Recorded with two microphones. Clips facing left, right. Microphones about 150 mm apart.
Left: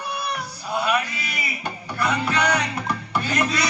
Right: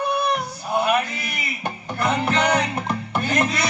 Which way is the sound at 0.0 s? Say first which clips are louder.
Right 7 dB; 55° right (ahead or behind).